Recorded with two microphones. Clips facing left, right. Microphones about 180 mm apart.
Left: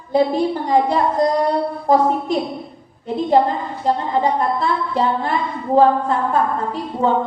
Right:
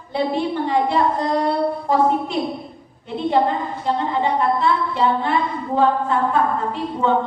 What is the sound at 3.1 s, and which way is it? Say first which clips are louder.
Speech: left 4 dB; 40° left (ahead or behind).